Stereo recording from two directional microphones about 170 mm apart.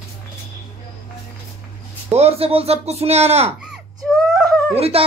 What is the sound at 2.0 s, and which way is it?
Speech, 35° right (ahead or behind).